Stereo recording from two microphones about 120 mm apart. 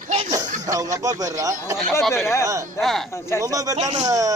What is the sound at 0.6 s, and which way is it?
Speech, 30° right (ahead or behind).